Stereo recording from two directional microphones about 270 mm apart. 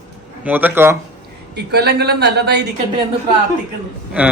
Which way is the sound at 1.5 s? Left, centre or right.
Right.